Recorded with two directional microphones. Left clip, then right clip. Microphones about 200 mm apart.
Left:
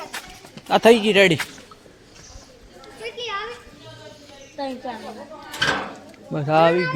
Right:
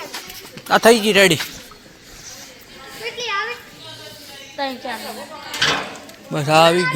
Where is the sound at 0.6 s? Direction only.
Centre (ahead or behind).